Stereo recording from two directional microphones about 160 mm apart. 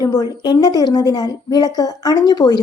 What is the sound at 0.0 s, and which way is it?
A woman's voice, 25° left (ahead or behind).